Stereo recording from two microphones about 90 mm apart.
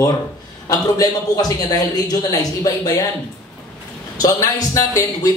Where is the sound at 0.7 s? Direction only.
45° left (ahead or behind).